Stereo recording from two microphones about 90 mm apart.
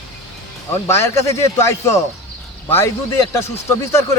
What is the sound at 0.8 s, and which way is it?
Speech, 30° left (ahead or behind).